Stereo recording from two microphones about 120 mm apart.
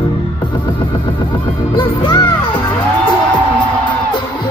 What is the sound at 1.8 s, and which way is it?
Music, 40° left (ahead or behind).